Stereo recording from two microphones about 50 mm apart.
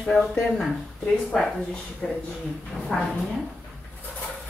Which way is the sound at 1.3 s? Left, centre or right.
Centre.